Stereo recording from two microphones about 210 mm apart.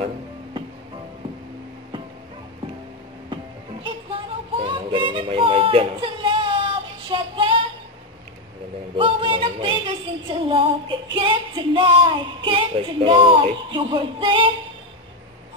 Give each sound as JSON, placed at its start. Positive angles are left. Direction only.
{"t": 3.8, "sound": "music", "side_deg": -25}
{"t": 8.9, "sound": "music", "side_deg": -25}